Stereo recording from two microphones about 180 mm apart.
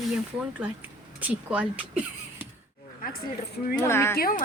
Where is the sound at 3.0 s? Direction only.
50° left (ahead or behind).